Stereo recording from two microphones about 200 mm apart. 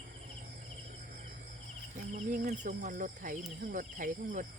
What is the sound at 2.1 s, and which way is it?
Speech, 40° right (ahead or behind).